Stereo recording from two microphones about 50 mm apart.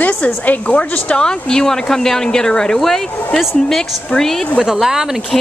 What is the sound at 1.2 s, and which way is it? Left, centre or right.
Speech, centre.